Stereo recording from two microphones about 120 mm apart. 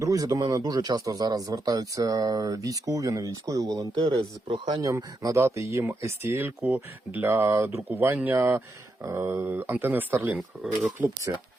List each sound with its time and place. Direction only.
0.0 s speech: 30° right (ahead or behind)
4.2 s speech: 45° right (ahead or behind); by 10.3 s 15° right (ahead or behind)
11.3 s speech: 30° right (ahead or behind)